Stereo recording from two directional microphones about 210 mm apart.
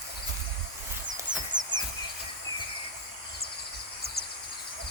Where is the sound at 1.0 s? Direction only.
35° right (ahead or behind).